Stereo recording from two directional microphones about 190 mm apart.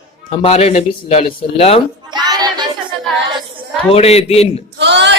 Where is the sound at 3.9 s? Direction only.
30° left (ahead or behind).